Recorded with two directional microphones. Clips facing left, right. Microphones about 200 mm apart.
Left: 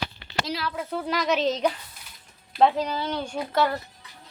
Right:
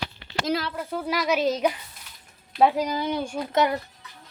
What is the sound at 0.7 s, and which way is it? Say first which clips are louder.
Speech: even; centre (ahead or behind).